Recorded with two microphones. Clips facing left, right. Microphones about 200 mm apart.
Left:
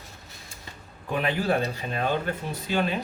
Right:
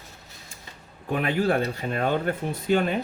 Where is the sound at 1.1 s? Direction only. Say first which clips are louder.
Right 2 dB; 50° right (ahead or behind).